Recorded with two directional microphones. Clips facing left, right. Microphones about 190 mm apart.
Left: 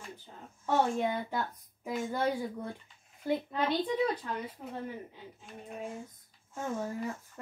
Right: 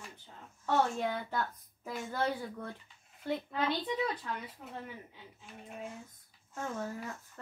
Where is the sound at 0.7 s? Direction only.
15° left (ahead or behind).